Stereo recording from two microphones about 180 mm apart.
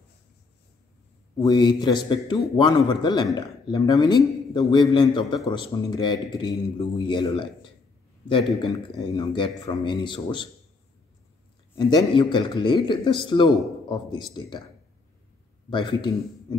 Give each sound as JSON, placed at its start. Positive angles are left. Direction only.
{"t": 1.4, "sound": "a man's voice", "side_deg": 25}
{"t": 8.7, "sound": "a man's voice", "side_deg": 25}
{"t": 11.7, "sound": "a man's voice", "side_deg": 25}
{"t": 15.7, "sound": "a man's voice", "side_deg": 25}